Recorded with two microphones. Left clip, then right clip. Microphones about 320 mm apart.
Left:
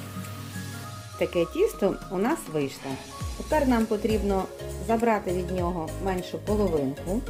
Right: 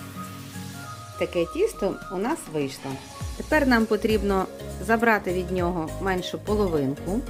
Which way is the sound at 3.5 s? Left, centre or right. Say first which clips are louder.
Right 3 dB; right.